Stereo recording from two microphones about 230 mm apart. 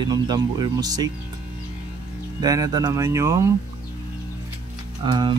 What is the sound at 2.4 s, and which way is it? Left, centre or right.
Speech, centre.